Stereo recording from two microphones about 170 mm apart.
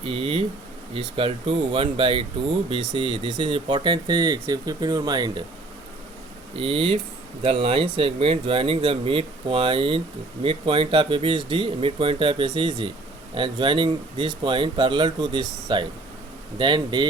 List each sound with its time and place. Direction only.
0.0 s speech: 35° right (ahead or behind)
6.6 s speech: 35° right (ahead or behind)